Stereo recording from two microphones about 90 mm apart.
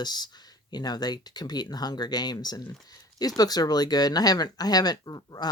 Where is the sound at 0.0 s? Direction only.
50° left (ahead or behind).